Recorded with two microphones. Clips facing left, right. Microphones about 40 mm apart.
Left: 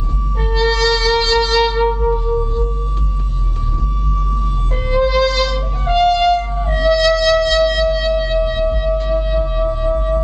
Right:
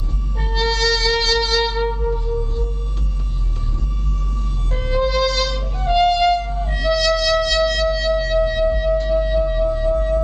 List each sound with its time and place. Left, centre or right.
0.4 s music: centre
4.8 s music: centre
9.4 s wind instrument: left